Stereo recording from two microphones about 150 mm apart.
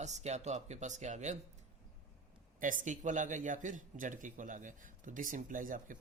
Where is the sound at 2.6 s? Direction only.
60° right (ahead or behind).